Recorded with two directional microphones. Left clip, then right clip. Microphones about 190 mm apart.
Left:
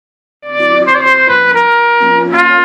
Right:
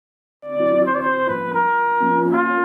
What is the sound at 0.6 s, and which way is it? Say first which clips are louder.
Trumpet: left 8 dB; 15° left (ahead or behind).